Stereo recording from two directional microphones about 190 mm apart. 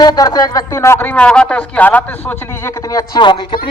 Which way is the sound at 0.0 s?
20° left (ahead or behind).